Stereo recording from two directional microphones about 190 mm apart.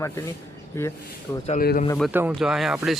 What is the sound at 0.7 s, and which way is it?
Speech, 15° left (ahead or behind).